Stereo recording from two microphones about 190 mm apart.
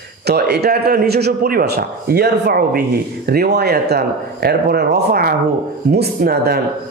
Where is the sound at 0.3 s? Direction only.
60° right (ahead or behind).